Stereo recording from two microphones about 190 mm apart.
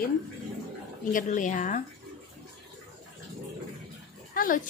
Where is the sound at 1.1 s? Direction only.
40° left (ahead or behind).